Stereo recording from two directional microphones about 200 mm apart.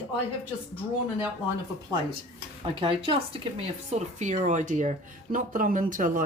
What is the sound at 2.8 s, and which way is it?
Speech, 25° right (ahead or behind).